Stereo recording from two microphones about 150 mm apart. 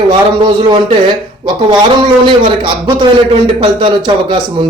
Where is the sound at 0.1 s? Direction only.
35° right (ahead or behind).